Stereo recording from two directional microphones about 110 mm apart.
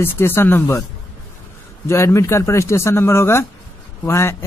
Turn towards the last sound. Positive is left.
turn(degrees=25)  # may be behind; listen again after turning